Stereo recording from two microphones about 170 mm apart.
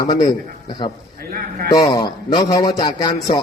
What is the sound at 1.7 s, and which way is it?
A man's voice, 25° left (ahead or behind).